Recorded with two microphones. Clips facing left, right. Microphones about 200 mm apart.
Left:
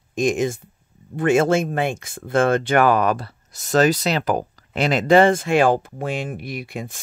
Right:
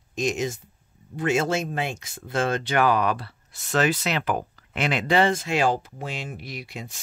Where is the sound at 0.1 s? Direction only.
55° left (ahead or behind).